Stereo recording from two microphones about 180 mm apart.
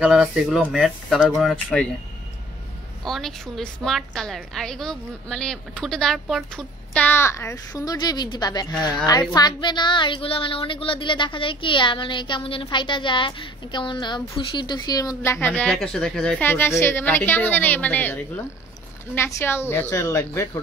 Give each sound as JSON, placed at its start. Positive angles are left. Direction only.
{"t": 0.0, "sound": "speech", "side_deg": 0}
{"t": 3.0, "sound": "a woman's voice", "side_deg": 0}
{"t": 15.4, "sound": "a woman's voice", "side_deg": 10}